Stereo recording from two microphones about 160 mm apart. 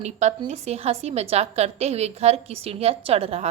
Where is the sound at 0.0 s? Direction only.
45° right (ahead or behind).